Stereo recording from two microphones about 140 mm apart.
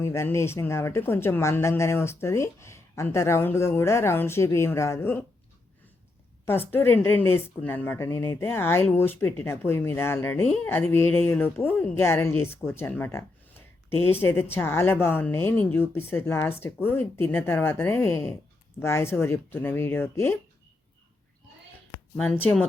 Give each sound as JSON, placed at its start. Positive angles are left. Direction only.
{"t": 0.0, "sound": "speech", "side_deg": 20}
{"t": 6.4, "sound": "a woman's voice", "side_deg": 15}